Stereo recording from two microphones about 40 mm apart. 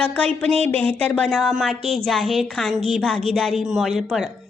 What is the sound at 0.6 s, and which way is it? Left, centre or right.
Speech, left.